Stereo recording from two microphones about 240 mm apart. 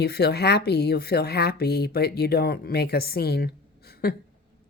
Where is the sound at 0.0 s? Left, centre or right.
Left.